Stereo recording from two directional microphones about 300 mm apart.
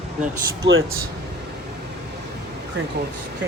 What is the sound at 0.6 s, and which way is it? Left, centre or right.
Speech, right.